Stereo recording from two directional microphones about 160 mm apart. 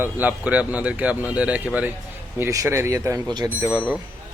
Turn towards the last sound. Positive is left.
turn(degrees=-10)  # may be behind; listen again after turning